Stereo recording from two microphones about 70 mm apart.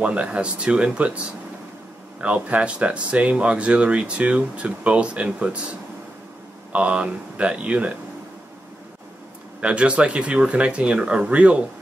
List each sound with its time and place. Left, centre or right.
0.0 s speech: centre
9.6 s speech: centre